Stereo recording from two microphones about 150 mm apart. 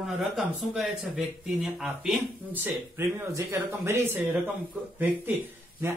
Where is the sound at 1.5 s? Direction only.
5° right (ahead or behind).